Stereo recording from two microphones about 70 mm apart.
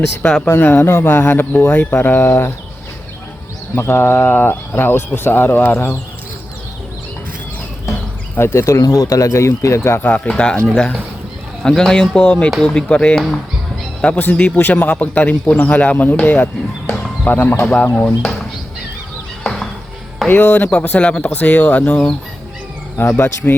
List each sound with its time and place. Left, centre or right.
0.4 s speech: left
3.8 s speech: left
8.4 s speech: left
10.0 s a man's voice: left
11.6 s speech: centre
14.2 s a man's voice: left
17.6 s a man's voice: centre
19.4 s music: centre
20.2 s a man's voice: left
23.1 s speech: left